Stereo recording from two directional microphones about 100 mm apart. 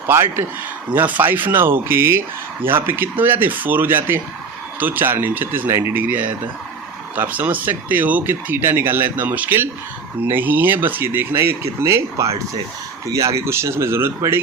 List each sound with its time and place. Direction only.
0.1 s speech: 25° right (ahead or behind)